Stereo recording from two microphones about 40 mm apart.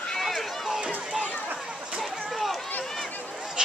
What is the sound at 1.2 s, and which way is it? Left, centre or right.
Chatter, right.